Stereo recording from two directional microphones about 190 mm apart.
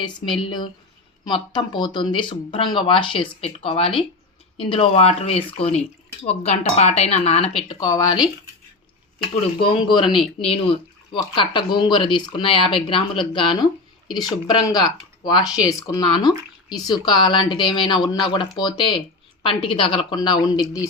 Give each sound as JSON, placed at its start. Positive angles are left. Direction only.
{"t": 0.0, "sound": "speech", "side_deg": 25}
{"t": 7.8, "sound": "speech", "side_deg": 20}
{"t": 9.6, "sound": "speech", "side_deg": 25}